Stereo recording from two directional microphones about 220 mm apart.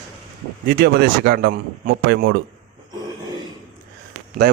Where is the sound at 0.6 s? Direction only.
45° right (ahead or behind).